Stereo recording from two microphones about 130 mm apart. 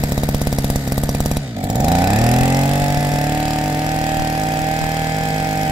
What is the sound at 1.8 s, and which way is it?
Vehicle, 10° right (ahead or behind).